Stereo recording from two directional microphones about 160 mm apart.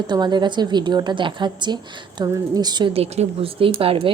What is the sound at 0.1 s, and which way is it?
A woman's voice, 25° right (ahead or behind).